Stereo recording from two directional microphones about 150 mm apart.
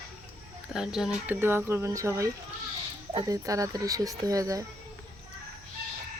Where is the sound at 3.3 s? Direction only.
20° right (ahead or behind).